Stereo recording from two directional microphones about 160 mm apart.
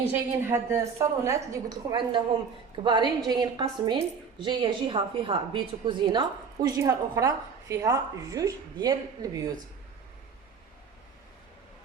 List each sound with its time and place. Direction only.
0.1 s a woman's voice: 15° right (ahead or behind)